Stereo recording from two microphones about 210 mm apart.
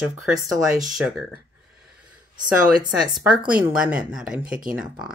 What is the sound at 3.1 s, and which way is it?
Speech, 5° right (ahead or behind).